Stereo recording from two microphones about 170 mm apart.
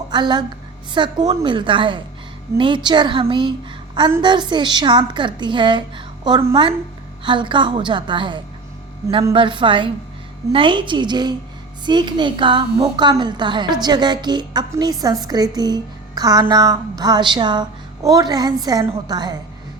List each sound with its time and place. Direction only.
0.1 s a woman's voice: 25° right (ahead or behind)